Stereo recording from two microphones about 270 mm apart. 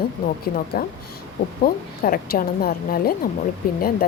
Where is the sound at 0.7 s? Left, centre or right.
Left.